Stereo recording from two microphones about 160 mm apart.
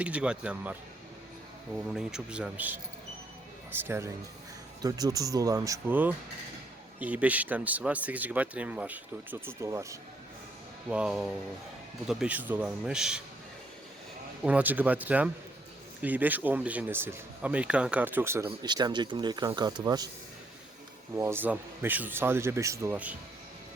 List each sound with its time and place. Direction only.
0.0 s speech: 5° right (ahead or behind)
1.9 s speech: 5° right (ahead or behind); by 10.0 s 20° right (ahead or behind)
10.8 s a man's voice: 5° right (ahead or behind)
14.4 s speech: 10° right (ahead or behind)
21.2 s speech: 15° right (ahead or behind)